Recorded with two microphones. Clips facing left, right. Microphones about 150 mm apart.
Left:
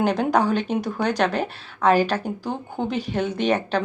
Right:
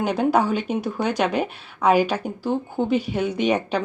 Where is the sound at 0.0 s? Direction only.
5° right (ahead or behind).